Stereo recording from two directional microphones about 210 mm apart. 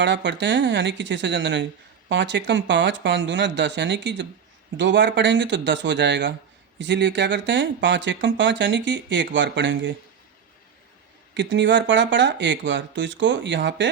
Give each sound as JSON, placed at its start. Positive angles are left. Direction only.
{"t": 0.0, "sound": "speech", "side_deg": -60}
{"t": 11.3, "sound": "speech", "side_deg": -60}